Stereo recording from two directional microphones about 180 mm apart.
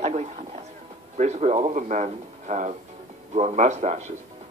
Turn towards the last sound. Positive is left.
turn(degrees=-40)  # may be behind; listen again after turning